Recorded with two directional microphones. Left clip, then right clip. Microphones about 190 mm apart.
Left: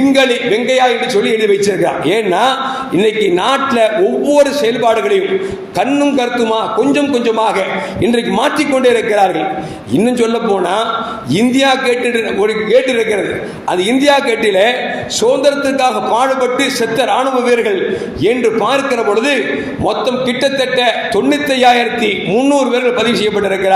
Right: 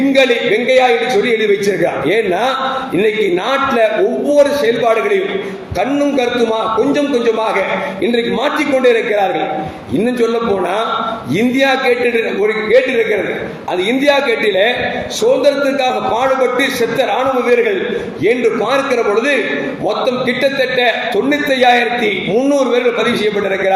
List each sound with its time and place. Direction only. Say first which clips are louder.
0.0 s a man's voice: even; 35° left (ahead or behind)
11.3 s a man's voice: left 2 dB; 35° left (ahead or behind)
14.0 s a man's voice: left 1 dB; 40° left (ahead or behind)